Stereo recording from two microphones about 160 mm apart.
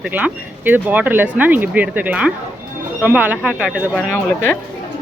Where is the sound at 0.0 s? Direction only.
10° right (ahead or behind).